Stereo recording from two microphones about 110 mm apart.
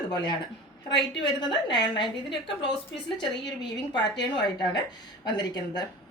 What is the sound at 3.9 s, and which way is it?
A woman's voice, 45° left (ahead or behind).